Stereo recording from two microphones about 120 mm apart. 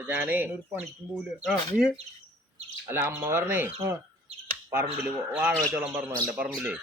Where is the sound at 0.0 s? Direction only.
15° right (ahead or behind).